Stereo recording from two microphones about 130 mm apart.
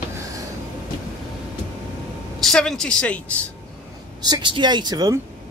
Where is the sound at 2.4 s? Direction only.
5° left (ahead or behind).